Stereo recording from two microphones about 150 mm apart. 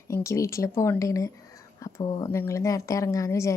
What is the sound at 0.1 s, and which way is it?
Speech, 20° left (ahead or behind).